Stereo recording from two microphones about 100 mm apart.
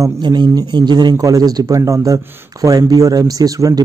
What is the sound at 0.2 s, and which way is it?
Speech, 45° right (ahead or behind).